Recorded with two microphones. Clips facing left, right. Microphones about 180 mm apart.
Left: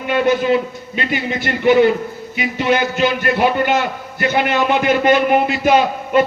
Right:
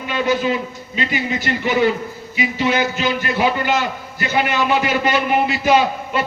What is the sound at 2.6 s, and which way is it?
A man's voice, 55° left (ahead or behind).